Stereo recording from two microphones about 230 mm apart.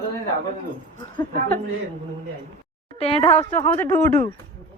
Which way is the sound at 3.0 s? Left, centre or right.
Left.